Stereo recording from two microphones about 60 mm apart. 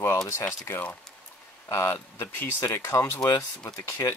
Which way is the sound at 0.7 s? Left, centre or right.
Left.